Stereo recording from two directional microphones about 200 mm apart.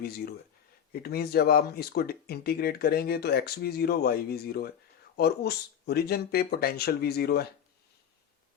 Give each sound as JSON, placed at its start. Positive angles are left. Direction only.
{"t": 1.0, "sound": "speech", "side_deg": 50}